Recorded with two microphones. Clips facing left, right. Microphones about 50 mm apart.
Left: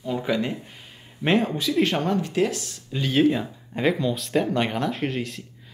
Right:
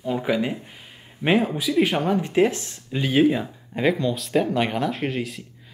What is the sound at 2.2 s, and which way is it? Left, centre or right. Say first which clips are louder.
Speech: right 4 dB; right.